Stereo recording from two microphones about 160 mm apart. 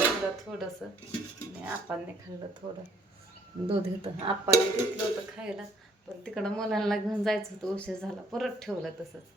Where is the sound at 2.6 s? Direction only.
30° right (ahead or behind).